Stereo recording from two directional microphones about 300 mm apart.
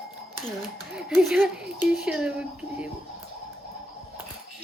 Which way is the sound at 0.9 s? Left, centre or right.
Centre.